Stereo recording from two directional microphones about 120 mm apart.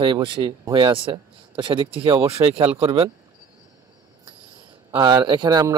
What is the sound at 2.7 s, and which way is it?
Speech, 55° right (ahead or behind).